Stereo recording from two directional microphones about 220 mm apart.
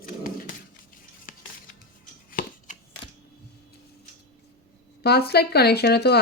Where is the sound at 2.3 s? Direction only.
40° left (ahead or behind).